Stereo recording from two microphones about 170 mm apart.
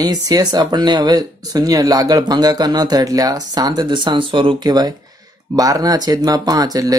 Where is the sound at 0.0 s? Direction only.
20° right (ahead or behind).